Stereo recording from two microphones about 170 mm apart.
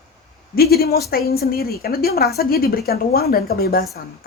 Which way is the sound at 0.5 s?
65° left (ahead or behind).